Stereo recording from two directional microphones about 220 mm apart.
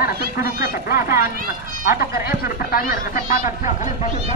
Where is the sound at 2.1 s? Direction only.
10° right (ahead or behind).